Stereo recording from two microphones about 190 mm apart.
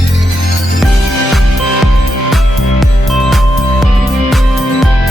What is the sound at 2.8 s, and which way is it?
Music, centre (ahead or behind).